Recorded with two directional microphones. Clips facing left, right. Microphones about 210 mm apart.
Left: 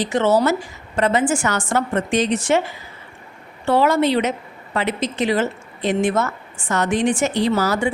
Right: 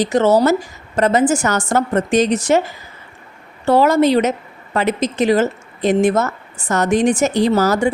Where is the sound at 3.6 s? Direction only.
40° right (ahead or behind).